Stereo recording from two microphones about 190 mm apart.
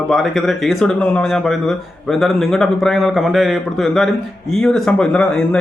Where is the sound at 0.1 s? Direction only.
Centre (ahead or behind).